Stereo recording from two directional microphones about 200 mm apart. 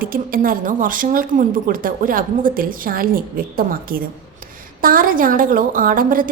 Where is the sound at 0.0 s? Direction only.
45° right (ahead or behind).